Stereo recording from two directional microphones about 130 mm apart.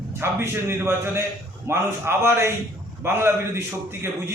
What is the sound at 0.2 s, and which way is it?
A man's voice, 20° right (ahead or behind).